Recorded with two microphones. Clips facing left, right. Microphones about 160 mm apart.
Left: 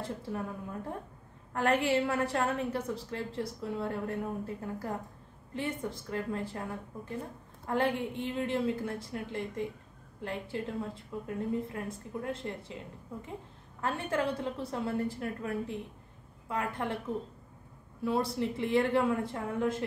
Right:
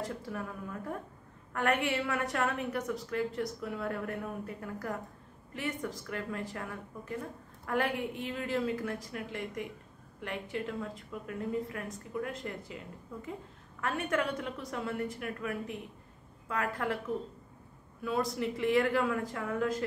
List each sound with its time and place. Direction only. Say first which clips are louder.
0.0 s a woman's voice: left 1 dB; 25° left (ahead or behind)
18.0 s a woman's voice: left 2 dB; 30° left (ahead or behind)